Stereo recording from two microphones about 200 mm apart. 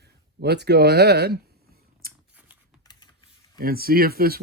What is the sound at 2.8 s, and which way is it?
Printer, 20° left (ahead or behind).